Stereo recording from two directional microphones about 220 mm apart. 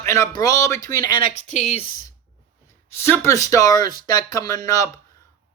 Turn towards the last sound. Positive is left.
turn(degrees=15)  # may be behind; listen again after turning